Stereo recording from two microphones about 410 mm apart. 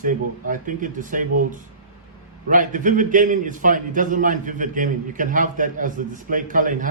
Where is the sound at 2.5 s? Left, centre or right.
Centre.